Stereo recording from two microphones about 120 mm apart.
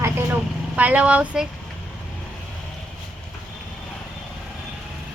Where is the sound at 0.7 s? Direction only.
10° right (ahead or behind).